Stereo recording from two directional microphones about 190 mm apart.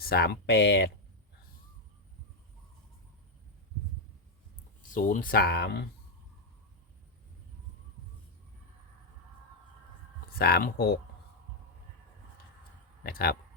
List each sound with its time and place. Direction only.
0.0 s speech: 55° left (ahead or behind)
4.8 s speech: 45° left (ahead or behind)
10.3 s speech: 50° left (ahead or behind)
13.0 s speech: 55° left (ahead or behind)